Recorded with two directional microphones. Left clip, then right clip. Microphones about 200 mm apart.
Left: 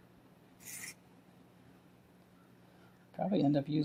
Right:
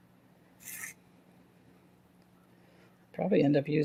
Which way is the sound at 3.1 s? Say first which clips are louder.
Right 6 dB; 45° right (ahead or behind).